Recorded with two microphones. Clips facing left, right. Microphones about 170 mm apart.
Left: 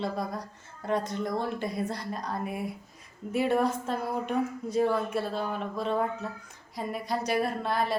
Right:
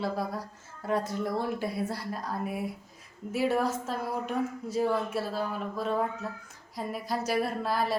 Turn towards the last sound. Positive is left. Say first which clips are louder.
# even
turn(degrees=0)  # may be behind; listen again after turning